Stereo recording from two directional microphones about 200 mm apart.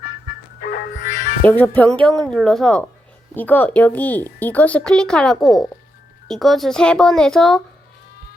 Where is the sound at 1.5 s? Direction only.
10° left (ahead or behind).